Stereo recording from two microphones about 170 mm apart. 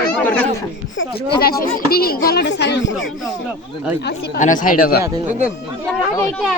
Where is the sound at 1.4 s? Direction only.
60° left (ahead or behind); by 2.9 s 90° left.